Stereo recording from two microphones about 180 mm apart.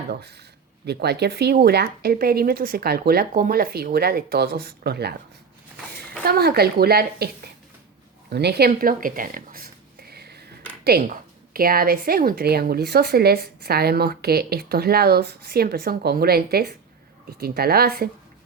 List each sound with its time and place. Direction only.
0.1 s speech: 65° right (ahead or behind)
6.2 s speech: 60° right (ahead or behind)
8.3 s a sound: 65° right (ahead or behind)
10.8 s speech: 55° right (ahead or behind)